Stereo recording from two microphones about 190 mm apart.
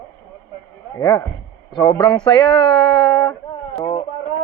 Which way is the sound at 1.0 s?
15° left (ahead or behind).